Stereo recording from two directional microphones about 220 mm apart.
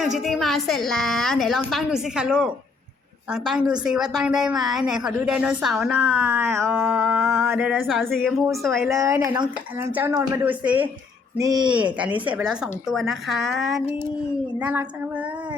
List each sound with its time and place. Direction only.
0.0 s a woman's voice: centre (ahead or behind)
9.0 s speech: 15° right (ahead or behind)
11.7 s a woman's voice: 5° right (ahead or behind)